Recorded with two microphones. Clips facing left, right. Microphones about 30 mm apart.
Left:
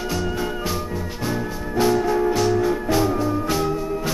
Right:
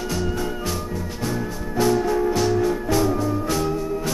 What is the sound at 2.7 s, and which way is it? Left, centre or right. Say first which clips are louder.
Music: left 1 dB; centre.